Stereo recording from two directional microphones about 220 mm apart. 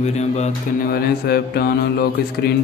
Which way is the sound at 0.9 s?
45° left (ahead or behind).